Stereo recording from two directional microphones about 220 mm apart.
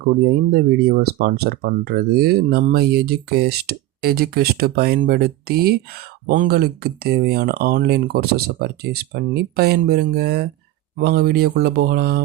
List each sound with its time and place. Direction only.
0.5 s speech: 45° right (ahead or behind)